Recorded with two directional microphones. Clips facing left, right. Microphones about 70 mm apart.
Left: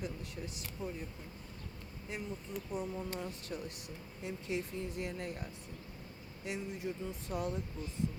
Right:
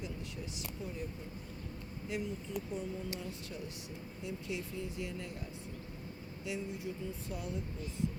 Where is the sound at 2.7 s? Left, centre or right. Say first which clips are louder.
Left 1 dB; left.